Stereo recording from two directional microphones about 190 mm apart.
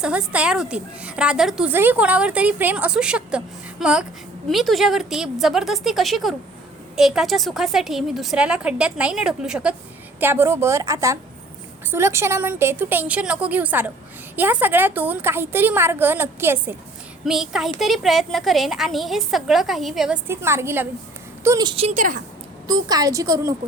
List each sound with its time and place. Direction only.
0.0 s a woman's voice: 5° right (ahead or behind)
20.2 s a woman's voice: 15° right (ahead or behind); by 22.2 s 40° right (ahead or behind)
22.6 s a woman's voice: 20° right (ahead or behind)